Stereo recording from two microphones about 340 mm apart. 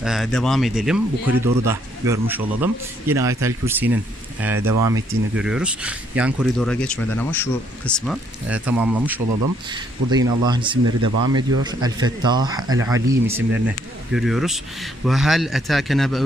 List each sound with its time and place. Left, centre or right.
0.0 s speech: centre